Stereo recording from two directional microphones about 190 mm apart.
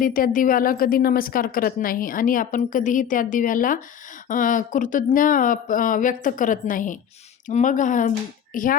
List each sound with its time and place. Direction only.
0.0 s a woman's voice: 45° left (ahead or behind)